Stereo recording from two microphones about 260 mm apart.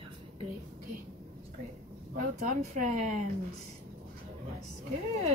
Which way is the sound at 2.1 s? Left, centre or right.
Right.